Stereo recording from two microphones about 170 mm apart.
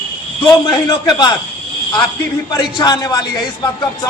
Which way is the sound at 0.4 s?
25° left (ahead or behind).